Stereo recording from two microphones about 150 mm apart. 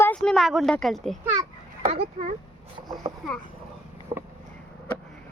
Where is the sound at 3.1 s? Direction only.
30° right (ahead or behind).